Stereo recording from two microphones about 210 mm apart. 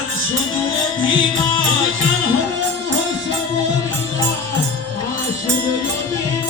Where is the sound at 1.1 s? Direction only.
70° right (ahead or behind).